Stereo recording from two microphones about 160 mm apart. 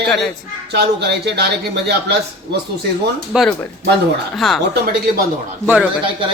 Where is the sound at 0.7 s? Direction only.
90° right.